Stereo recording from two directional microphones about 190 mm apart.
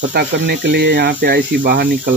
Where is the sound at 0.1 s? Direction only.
60° right (ahead or behind).